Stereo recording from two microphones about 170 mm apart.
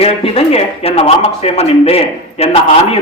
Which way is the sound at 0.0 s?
35° left (ahead or behind).